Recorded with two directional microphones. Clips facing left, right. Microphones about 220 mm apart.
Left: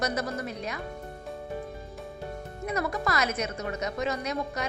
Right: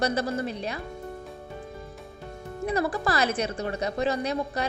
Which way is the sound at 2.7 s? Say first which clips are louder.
Right 3 dB; 30° right (ahead or behind).